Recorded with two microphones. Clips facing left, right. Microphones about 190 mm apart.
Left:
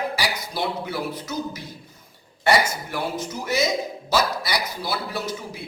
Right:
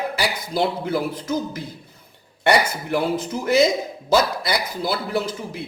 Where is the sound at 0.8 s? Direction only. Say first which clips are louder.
Right 5 dB; 50° right (ahead or behind).